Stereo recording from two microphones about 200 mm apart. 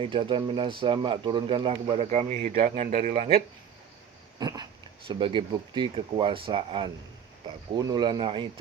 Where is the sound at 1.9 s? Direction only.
35° right (ahead or behind).